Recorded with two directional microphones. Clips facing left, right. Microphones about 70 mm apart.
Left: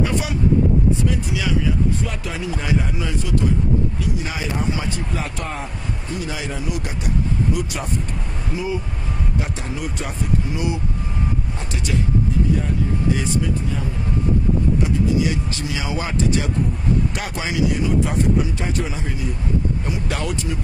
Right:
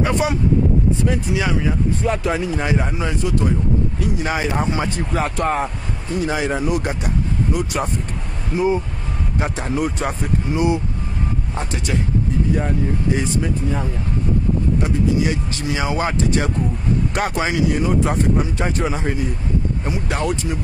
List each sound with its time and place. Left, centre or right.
0.0 s speech: right
4.0 s speech: right
13.1 s speech: right
19.9 s speech: right